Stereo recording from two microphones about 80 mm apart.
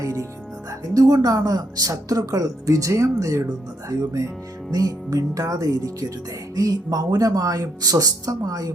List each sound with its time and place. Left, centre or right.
0.0 s music: right
0.9 s speech: right